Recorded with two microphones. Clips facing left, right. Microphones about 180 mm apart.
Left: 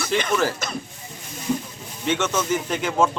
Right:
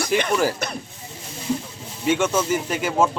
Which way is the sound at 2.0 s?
10° right (ahead or behind).